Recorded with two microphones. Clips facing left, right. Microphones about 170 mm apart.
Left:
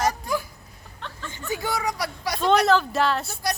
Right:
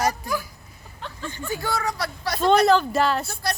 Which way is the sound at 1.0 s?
5° right (ahead or behind).